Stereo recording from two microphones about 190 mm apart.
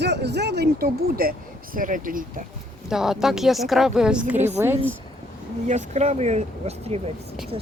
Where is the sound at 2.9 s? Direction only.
Centre (ahead or behind).